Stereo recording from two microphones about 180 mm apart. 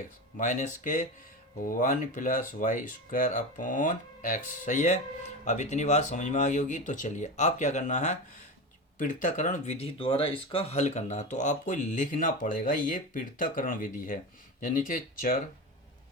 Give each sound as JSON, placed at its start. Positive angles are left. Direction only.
{"t": 0.3, "sound": "speech", "side_deg": 45}